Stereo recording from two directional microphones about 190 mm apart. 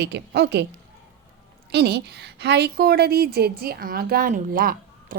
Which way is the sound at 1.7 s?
60° right (ahead or behind).